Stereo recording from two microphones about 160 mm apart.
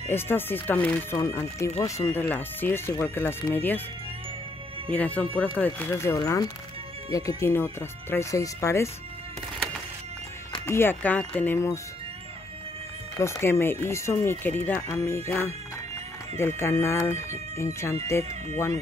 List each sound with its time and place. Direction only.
0.1 s speech: 15° left (ahead or behind)
4.9 s speech: 10° left (ahead or behind)
10.7 s speech: 15° left (ahead or behind)
13.2 s speech: 15° left (ahead or behind)